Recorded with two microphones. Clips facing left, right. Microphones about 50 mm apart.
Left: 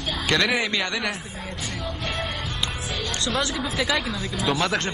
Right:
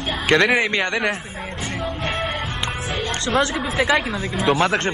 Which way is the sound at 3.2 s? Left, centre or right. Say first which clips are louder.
Right 6 dB; right.